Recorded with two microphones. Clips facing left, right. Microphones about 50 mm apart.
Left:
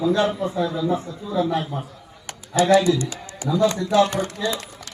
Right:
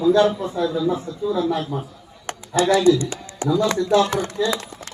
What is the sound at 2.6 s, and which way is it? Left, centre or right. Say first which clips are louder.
Speech: right 1 dB; centre.